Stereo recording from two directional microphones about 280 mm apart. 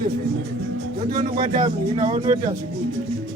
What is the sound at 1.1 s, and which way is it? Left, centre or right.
Speech, right.